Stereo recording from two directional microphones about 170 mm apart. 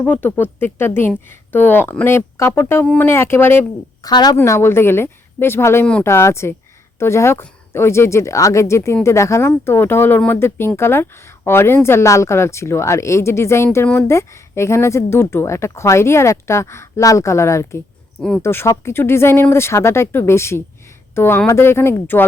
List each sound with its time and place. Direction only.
0.0 s speech: 10° left (ahead or behind)
4.1 s speech: 25° left (ahead or behind)
18.2 s speech: 5° left (ahead or behind)
18.4 s speech: 15° left (ahead or behind)